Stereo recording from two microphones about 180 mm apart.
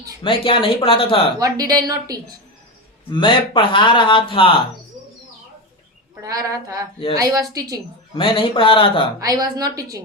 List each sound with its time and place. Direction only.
0.2 s speech: 30° left (ahead or behind)
1.4 s a woman's voice: 20° right (ahead or behind)
3.1 s speech: 25° left (ahead or behind)
6.2 s a woman's voice: 20° right (ahead or behind)
8.1 s speech: 30° left (ahead or behind)
9.2 s a woman's voice: 20° right (ahead or behind)